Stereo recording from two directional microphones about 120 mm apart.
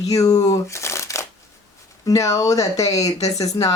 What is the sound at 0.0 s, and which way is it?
Speech, 30° left (ahead or behind).